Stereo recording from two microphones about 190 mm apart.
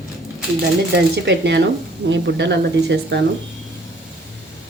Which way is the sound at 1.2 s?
65° right (ahead or behind).